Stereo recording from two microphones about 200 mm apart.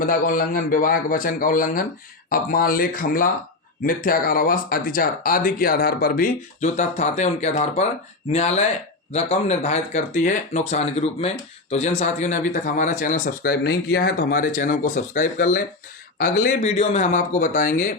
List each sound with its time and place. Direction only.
0.0 s speech: 45° left (ahead or behind)